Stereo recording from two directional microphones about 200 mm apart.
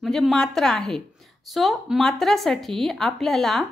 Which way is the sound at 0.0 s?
Centre (ahead or behind).